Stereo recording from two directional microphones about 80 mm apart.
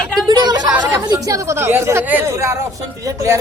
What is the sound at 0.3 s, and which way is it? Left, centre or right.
Chatter, right.